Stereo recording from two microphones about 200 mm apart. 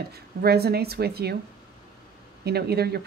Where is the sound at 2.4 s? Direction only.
55° right (ahead or behind).